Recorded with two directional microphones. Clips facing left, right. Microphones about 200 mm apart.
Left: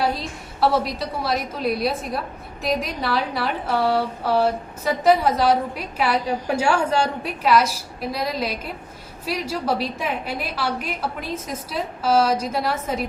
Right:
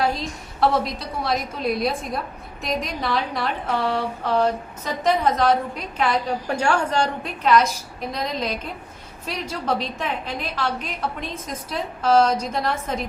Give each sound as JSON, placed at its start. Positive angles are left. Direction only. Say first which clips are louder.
{"t": 0.0, "sound": "a woman's voice", "louder": "even", "side_deg": 5}